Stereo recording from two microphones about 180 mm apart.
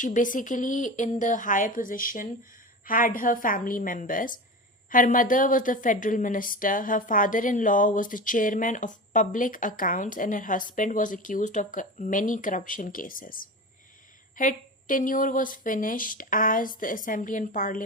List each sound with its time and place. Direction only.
0.0 s a woman's voice: 45° left (ahead or behind)